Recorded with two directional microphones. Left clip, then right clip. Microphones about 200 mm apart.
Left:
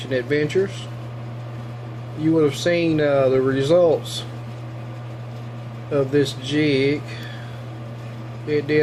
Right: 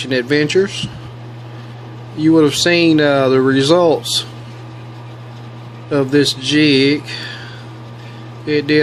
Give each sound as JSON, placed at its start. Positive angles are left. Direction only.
{"t": 0.0, "sound": "speech", "side_deg": -40}
{"t": 2.3, "sound": "speech", "side_deg": -45}
{"t": 5.9, "sound": "speech", "side_deg": -40}
{"t": 8.4, "sound": "speech", "side_deg": -40}